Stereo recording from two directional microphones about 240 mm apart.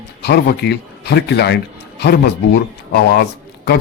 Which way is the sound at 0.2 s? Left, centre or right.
Left.